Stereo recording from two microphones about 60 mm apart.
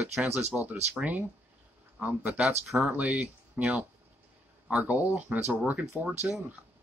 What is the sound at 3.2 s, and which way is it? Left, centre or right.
Speech, right.